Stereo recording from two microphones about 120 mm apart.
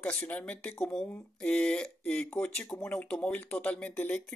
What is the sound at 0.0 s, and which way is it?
Speech, 10° left (ahead or behind).